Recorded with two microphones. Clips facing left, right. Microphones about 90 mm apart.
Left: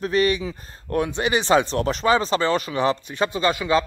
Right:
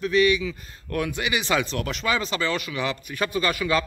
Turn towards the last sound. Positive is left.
turn(degrees=25)  # may be behind; listen again after turning